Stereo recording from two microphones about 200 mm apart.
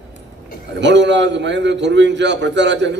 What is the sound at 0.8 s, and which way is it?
A man's voice, 60° right (ahead or behind).